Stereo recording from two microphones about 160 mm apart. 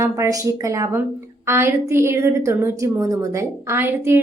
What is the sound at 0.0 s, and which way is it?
Speech, 20° right (ahead or behind).